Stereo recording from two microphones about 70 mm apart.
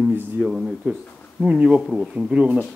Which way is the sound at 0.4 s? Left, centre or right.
Centre.